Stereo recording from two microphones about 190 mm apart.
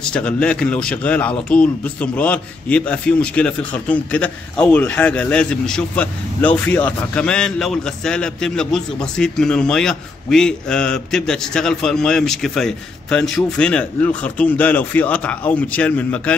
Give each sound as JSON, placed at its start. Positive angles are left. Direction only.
{"t": 0.1, "sound": "speech", "side_deg": 5}